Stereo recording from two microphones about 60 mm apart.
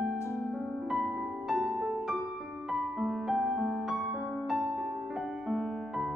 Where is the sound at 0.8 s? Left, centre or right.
Centre.